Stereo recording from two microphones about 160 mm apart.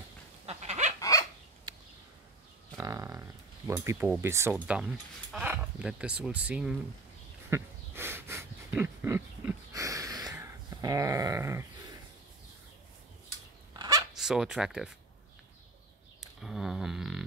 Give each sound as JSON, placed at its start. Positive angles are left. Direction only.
{"t": 0.5, "sound": "fowl", "side_deg": -45}
{"t": 1.7, "sound": "a sound", "side_deg": -25}
{"t": 4.6, "sound": "speech", "side_deg": -5}
{"t": 7.4, "sound": "wheeze", "side_deg": -15}
{"t": 13.7, "sound": "zipper", "side_deg": -20}
{"t": 14.1, "sound": "speech", "side_deg": -5}
{"t": 16.2, "sound": "a sound", "side_deg": 0}